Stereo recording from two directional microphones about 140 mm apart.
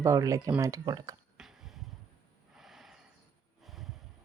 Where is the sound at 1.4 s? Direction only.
5° right (ahead or behind).